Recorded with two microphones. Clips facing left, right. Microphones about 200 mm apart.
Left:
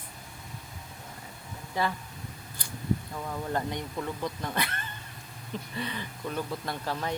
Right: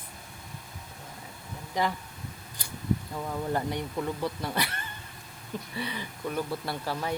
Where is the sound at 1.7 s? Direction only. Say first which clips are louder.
Right 1 dB; 15° right (ahead or behind).